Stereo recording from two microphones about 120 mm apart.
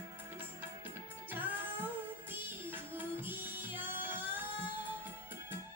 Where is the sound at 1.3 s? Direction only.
15° right (ahead or behind).